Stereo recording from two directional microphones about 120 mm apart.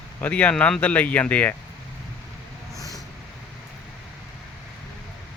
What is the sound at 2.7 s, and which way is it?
Vehicle, 30° left (ahead or behind).